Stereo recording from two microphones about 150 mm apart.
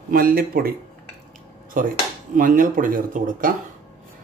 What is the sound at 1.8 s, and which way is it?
Speech, 65° right (ahead or behind).